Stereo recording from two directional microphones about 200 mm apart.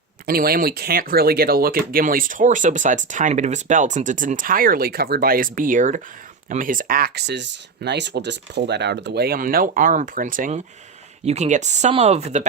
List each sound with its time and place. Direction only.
0.3 s speech: 50° right (ahead or behind); by 12.5 s 35° right (ahead or behind)